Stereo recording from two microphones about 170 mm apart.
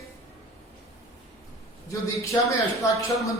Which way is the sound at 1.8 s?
15° left (ahead or behind).